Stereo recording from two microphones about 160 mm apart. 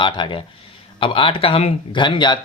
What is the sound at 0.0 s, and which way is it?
Speech, 30° left (ahead or behind).